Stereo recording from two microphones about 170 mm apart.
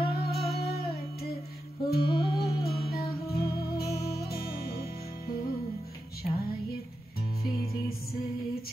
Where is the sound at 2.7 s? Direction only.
65° left (ahead or behind).